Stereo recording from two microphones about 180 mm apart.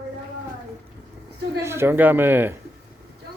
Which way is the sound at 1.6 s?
15° right (ahead or behind).